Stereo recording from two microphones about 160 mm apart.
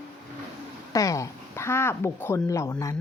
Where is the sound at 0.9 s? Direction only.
20° left (ahead or behind).